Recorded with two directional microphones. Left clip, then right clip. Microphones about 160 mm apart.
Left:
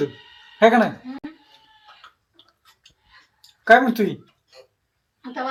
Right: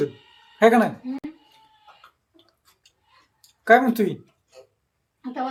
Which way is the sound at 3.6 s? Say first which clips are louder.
Left 2 dB; 10° left (ahead or behind).